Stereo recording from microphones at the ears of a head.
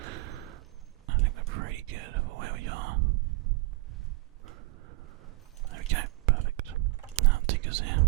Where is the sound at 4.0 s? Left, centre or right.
Right.